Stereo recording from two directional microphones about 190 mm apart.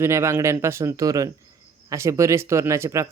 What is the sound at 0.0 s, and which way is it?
Speech, 15° right (ahead or behind).